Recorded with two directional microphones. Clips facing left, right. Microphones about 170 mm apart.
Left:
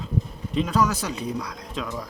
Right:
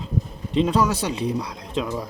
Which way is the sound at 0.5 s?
30° right (ahead or behind).